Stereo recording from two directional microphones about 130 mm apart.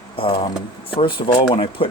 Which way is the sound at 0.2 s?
40° left (ahead or behind).